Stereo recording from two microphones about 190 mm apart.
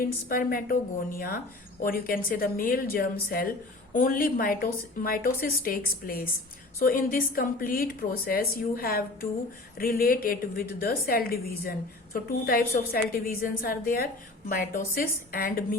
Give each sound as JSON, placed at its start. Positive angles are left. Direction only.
{"t": 0.0, "sound": "a woman's voice", "side_deg": 50}